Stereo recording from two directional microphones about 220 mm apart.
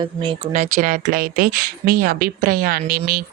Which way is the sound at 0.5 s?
35° right (ahead or behind).